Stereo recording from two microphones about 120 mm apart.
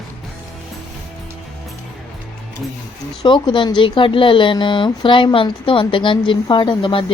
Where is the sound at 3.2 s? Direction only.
40° left (ahead or behind).